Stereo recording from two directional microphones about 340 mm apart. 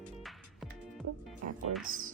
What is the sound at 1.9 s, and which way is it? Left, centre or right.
Speech, right.